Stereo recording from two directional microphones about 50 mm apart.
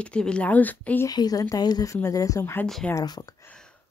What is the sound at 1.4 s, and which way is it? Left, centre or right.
Speech, left.